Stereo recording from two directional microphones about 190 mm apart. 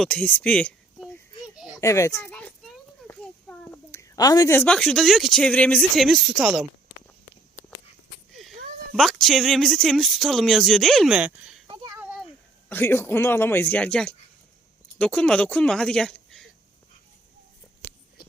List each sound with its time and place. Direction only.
0.0 s speech: 5° left (ahead or behind)
1.8 s a child's voice: 15° left (ahead or behind)
3.6 s speech: 10° left (ahead or behind)
8.3 s a sound: centre (ahead or behind)
9.0 s speech: centre (ahead or behind)
11.7 s a sound: 25° right (ahead or behind)
12.6 s speech: 10° left (ahead or behind)